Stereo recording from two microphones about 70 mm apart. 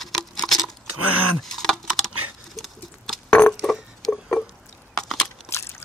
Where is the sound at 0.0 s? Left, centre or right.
Centre.